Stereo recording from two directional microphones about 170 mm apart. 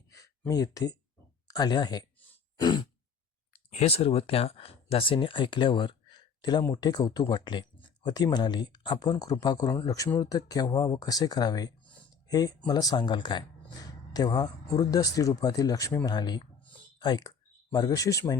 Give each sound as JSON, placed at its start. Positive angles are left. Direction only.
{"t": 0.2, "sound": "speech", "side_deg": 20}
{"t": 3.7, "sound": "speech", "side_deg": 40}